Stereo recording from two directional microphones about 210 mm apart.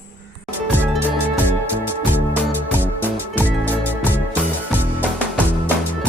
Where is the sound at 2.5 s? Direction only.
10° right (ahead or behind).